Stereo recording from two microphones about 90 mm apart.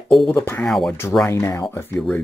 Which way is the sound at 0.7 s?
5° left (ahead or behind).